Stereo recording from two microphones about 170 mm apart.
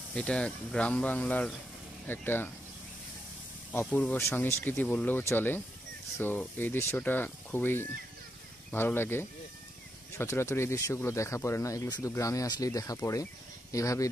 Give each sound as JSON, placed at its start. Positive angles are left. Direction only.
{"t": 0.1, "sound": "speech", "side_deg": 5}
{"t": 3.9, "sound": "speech", "side_deg": 10}